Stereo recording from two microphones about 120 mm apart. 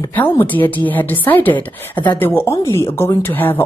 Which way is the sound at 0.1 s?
15° left (ahead or behind).